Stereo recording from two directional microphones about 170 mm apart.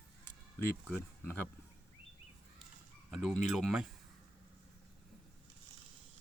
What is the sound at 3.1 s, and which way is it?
Speech, centre (ahead or behind).